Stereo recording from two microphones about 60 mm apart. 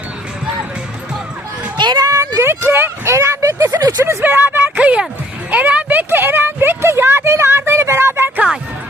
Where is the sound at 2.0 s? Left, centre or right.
Right.